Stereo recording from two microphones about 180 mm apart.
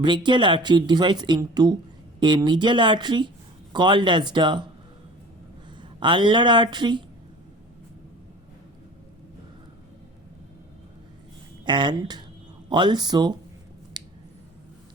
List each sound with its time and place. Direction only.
0.0 s speech: 25° right (ahead or behind)
5.7 s speech: 25° right (ahead or behind)
11.6 s speech: 25° right (ahead or behind)
14.0 s scissors: 25° right (ahead or behind)